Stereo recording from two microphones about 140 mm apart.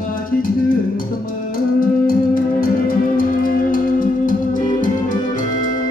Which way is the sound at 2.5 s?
90° left.